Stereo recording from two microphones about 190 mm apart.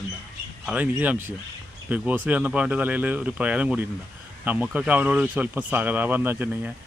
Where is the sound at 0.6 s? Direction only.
5° right (ahead or behind).